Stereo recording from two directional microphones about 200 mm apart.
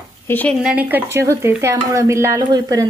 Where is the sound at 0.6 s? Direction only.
10° right (ahead or behind).